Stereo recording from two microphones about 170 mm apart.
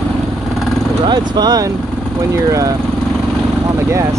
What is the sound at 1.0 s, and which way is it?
Speech, 25° right (ahead or behind).